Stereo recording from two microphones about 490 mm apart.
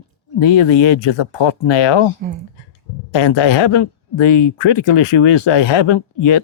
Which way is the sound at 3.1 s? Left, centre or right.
Left.